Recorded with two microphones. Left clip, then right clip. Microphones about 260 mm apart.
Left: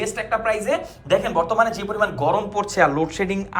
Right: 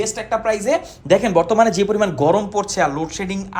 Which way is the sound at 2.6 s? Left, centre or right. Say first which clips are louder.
Left 1 dB; centre.